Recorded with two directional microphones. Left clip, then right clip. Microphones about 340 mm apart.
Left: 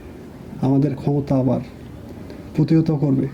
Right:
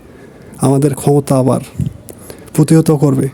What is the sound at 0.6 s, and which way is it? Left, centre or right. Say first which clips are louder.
A man's voice: right 8 dB; right.